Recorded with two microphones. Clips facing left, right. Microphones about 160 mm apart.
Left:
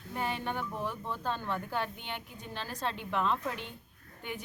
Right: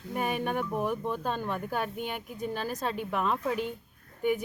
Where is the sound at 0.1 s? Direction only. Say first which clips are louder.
Right 5 dB; 10° right (ahead or behind).